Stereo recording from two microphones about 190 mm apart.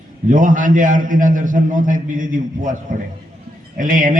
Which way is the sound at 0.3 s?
45° right (ahead or behind).